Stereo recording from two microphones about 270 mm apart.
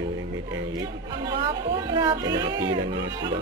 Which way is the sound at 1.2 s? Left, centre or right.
Centre.